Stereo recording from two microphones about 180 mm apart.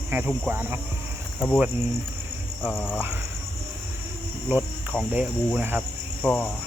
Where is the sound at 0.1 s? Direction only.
10° right (ahead or behind).